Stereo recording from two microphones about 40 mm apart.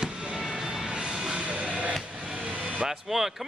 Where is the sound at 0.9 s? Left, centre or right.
Right.